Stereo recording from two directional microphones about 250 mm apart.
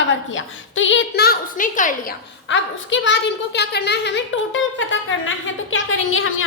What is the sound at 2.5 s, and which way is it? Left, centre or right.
A woman's voice, left.